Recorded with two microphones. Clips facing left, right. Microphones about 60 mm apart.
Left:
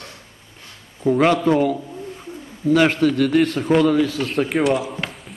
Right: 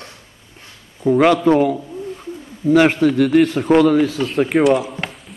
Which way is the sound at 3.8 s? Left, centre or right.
Right.